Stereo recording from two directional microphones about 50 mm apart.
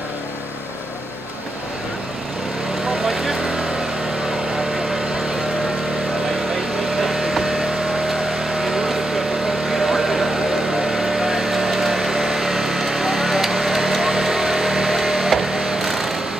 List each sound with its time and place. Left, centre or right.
3.1 s vehicle: centre
7.0 s vehicle: centre